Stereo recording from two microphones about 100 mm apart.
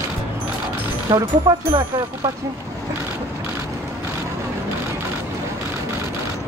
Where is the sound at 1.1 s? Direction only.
50° right (ahead or behind).